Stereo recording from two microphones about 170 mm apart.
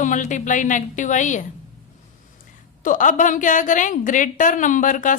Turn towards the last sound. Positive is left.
turn(degrees=50)  # may be behind; listen again after turning